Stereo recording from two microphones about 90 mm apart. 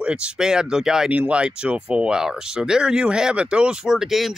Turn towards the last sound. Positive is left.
turn(degrees=-5)  # may be behind; listen again after turning